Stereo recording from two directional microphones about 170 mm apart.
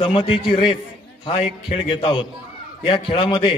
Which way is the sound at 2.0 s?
30° left (ahead or behind).